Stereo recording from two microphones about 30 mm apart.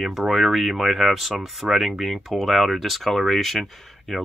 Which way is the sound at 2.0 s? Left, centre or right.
Centre.